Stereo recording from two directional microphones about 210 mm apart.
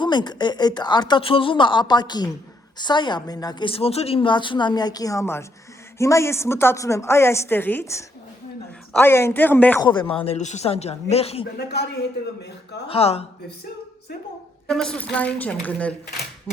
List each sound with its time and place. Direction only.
0.0 s a woman's voice: 20° left (ahead or behind)
9.8 s a woman's voice: 20° left (ahead or behind)
12.4 s a man's voice: 55° left (ahead or behind)
12.9 s a woman's voice: 30° left (ahead or behind)
14.7 s a woman's voice: 5° left (ahead or behind)